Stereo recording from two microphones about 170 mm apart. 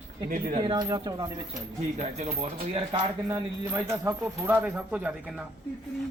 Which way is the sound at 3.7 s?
15° right (ahead or behind).